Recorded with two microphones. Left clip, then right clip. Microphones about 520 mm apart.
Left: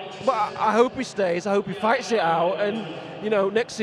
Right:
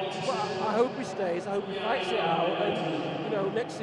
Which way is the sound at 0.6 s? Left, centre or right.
Left.